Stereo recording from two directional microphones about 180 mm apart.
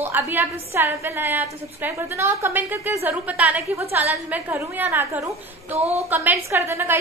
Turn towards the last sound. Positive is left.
turn(degrees=-15)  # may be behind; listen again after turning